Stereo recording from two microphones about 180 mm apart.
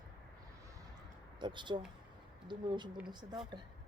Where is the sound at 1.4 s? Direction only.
25° right (ahead or behind).